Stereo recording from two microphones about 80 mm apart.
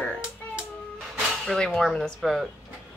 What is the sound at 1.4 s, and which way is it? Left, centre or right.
Speech, centre.